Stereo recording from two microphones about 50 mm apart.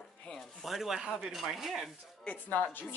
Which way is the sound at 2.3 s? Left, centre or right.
Left.